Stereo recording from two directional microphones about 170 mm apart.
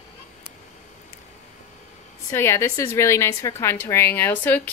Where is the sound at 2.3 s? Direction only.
15° left (ahead or behind).